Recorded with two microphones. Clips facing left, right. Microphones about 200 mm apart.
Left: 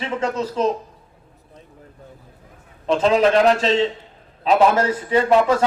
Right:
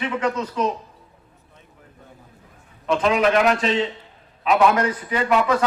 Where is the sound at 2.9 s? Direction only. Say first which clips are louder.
Left 3 dB; 30° left (ahead or behind).